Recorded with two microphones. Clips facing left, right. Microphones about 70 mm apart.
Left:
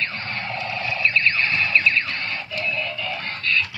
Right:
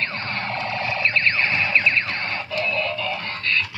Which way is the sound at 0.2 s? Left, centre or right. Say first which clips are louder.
Right 2 dB; right.